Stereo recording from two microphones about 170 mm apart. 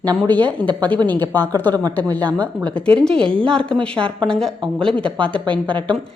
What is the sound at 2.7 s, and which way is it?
A woman's voice, 5° left (ahead or behind).